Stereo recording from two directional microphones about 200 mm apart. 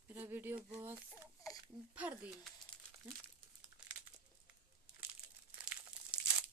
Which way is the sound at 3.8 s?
5° right (ahead or behind).